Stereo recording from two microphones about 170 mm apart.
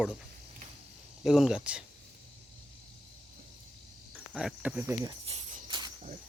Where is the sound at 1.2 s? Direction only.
Centre (ahead or behind).